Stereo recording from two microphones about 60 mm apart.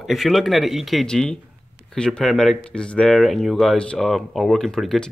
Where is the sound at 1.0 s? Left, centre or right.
Centre.